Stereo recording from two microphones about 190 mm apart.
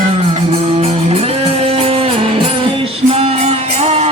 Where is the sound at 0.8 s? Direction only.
30° right (ahead or behind).